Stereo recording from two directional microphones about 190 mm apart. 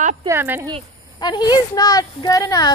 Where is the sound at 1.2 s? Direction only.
25° left (ahead or behind).